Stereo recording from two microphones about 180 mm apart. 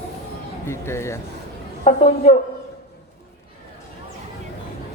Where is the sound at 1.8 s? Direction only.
40° left (ahead or behind).